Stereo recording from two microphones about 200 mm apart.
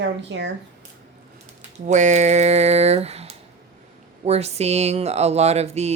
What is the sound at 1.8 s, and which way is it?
Speech, 35° right (ahead or behind).